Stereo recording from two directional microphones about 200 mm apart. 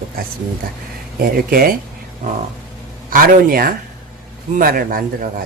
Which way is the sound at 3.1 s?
45° right (ahead or behind).